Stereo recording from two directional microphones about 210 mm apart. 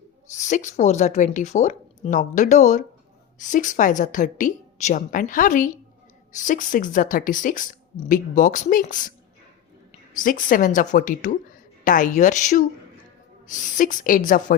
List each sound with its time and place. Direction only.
0.3 s a woman's voice: 35° left (ahead or behind)
10.2 s a woman's voice: 40° left (ahead or behind)